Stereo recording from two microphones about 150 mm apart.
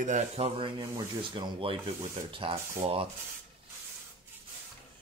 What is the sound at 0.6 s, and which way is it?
Speech, 35° right (ahead or behind).